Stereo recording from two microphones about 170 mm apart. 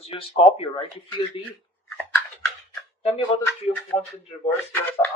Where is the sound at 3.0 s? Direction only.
35° left (ahead or behind).